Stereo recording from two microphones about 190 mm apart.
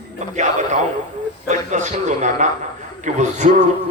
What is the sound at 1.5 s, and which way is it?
A man's voice, 40° right (ahead or behind).